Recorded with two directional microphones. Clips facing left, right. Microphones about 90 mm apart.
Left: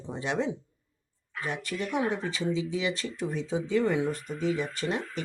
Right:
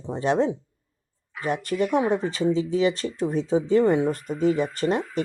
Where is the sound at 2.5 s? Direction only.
40° right (ahead or behind).